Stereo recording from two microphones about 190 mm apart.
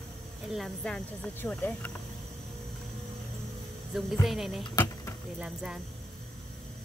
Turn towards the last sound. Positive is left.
turn(degrees=-5)  # may be behind; listen again after turning